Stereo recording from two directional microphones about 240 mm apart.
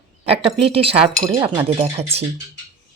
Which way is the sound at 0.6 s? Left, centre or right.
Right.